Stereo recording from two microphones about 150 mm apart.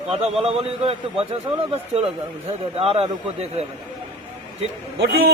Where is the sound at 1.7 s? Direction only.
45° right (ahead or behind).